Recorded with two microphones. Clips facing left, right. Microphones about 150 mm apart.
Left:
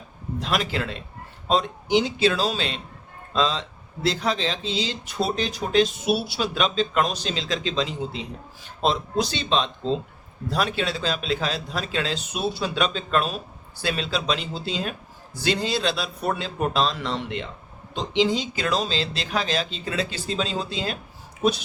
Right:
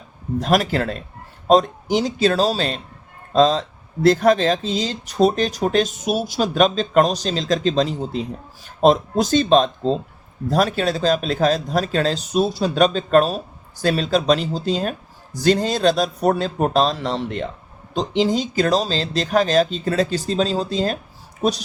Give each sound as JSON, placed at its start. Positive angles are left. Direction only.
{"t": 0.3, "sound": "speech", "side_deg": -45}